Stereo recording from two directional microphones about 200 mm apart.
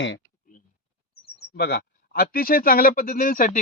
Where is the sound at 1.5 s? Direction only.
55° left (ahead or behind).